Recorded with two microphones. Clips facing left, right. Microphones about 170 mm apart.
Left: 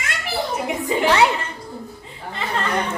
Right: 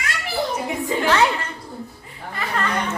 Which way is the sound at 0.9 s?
15° left (ahead or behind).